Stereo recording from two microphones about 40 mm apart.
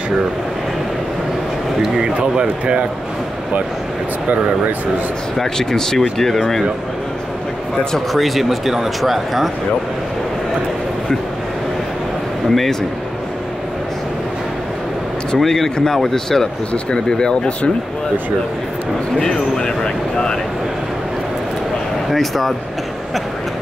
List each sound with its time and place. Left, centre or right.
2.0 s speech: right
5.4 s speech: centre
8.1 s speech: centre
12.4 s a man's voice: centre
15.3 s speech: centre
16.7 s speech: left
19.1 s speech: left
22.1 s speech: centre